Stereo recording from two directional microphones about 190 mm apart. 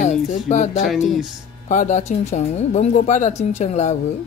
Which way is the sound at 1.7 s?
40° left (ahead or behind).